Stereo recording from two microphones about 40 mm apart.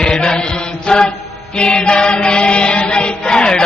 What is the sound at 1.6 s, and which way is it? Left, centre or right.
Chant, left.